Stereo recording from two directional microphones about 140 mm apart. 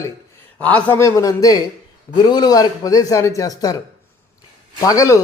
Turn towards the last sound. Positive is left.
turn(degrees=25)  # may be behind; listen again after turning